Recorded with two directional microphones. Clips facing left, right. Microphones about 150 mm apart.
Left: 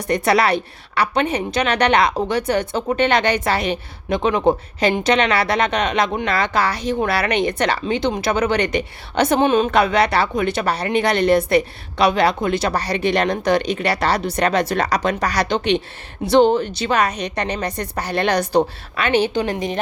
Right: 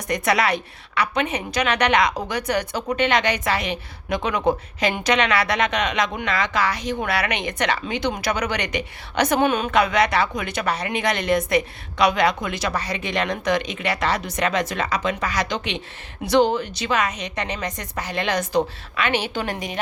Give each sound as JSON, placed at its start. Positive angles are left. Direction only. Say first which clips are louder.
{"t": 0.1, "sound": "a woman's voice", "louder": "left 4 dB", "side_deg": 30}
{"t": 19.3, "sound": "a woman's voice", "louder": "left 6 dB", "side_deg": 20}